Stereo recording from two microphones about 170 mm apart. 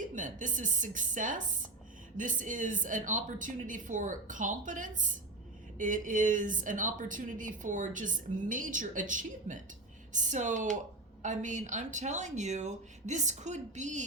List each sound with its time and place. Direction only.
0.1 s a woman's voice: 50° right (ahead or behind)